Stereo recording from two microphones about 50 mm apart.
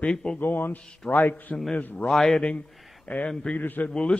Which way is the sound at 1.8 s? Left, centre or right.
Left.